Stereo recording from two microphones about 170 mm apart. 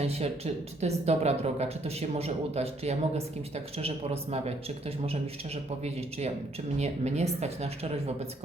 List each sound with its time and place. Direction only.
0.0 s speech: 35° right (ahead or behind)
5.8 s speech: 40° right (ahead or behind)